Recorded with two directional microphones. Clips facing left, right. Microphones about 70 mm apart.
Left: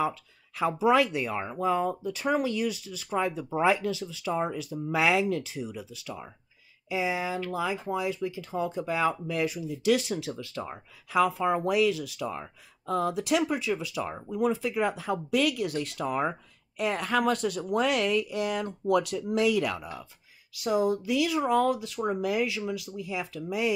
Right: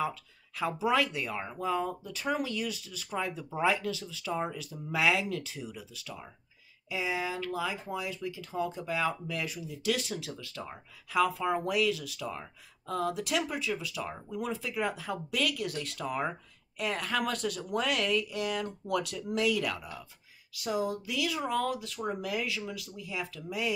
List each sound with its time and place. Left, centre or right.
0.0 s speech: left